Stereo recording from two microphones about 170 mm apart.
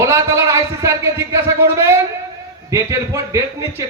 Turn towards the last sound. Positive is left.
turn(degrees=-20)  # may be behind; listen again after turning